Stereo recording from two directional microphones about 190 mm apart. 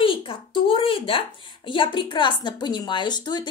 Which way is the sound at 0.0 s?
25° left (ahead or behind).